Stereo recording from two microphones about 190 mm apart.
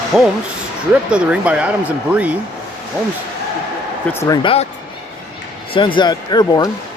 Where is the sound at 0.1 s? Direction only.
Centre (ahead or behind).